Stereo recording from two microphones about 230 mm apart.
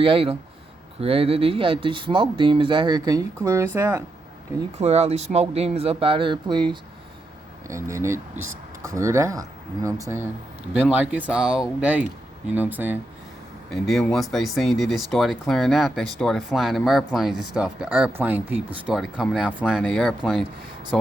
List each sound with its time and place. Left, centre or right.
0.0 s speech: right
4.8 s speech: right
7.7 s speech: centre